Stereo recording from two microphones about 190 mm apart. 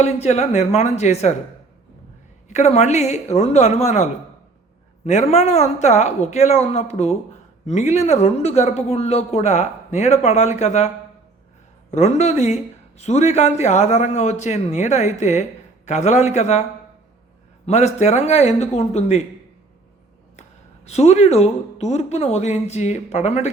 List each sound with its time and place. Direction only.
0.0 s a man's voice: 35° left (ahead or behind)
2.5 s a man's voice: 35° left (ahead or behind)
17.7 s a man's voice: 35° left (ahead or behind)
20.8 s a man's voice: 35° left (ahead or behind)